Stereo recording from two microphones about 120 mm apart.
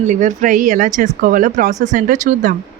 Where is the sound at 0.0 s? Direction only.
90° right.